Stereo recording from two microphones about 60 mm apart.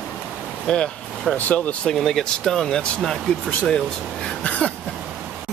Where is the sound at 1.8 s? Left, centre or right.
Centre.